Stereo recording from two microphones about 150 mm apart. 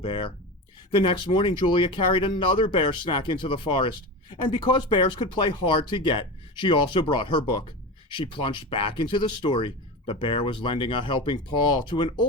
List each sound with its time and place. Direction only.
0.0 s speech: 35° left (ahead or behind)